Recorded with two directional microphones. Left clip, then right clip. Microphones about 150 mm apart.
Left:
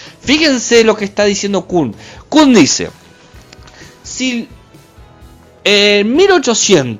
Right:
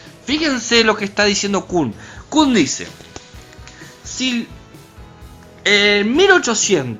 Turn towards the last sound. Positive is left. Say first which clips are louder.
# left 3 dB
turn(degrees=30)  # may be behind; listen again after turning